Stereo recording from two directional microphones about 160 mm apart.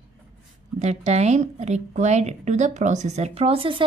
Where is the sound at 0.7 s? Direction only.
45° right (ahead or behind).